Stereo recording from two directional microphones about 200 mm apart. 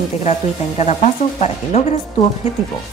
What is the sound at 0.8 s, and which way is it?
Speech, 35° left (ahead or behind).